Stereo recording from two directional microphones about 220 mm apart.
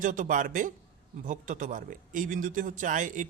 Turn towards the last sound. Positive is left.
turn(degrees=-35)  # may be behind; listen again after turning